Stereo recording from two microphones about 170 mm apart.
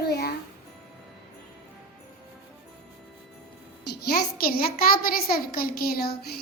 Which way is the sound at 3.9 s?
65° left (ahead or behind).